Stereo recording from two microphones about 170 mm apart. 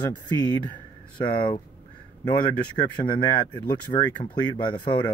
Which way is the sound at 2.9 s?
25° left (ahead or behind).